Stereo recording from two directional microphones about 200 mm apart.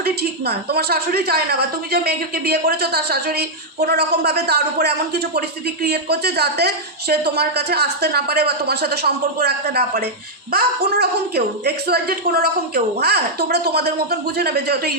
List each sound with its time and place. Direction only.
0.0 s a woman's voice: 50° right (ahead or behind)